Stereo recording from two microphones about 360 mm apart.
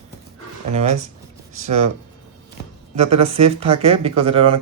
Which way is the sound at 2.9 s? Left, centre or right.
Centre.